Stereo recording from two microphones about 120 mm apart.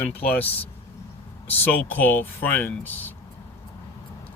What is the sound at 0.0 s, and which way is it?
Speech, 15° left (ahead or behind).